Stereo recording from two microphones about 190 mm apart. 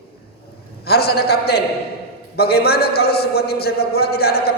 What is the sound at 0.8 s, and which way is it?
A man's voice, 55° left (ahead or behind).